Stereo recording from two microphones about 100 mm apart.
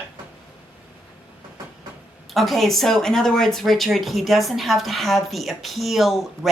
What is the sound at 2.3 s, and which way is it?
Speech, centre (ahead or behind).